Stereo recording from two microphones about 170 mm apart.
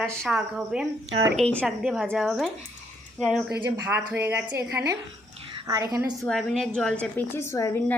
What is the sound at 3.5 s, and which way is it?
A woman's voice, 10° right (ahead or behind).